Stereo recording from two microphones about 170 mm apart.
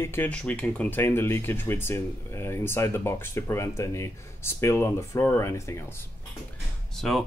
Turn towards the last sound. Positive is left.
turn(degrees=0)  # may be behind; listen again after turning